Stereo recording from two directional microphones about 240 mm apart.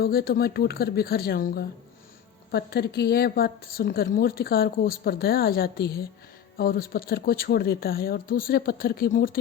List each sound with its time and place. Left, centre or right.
0.0 s a woman's voice: left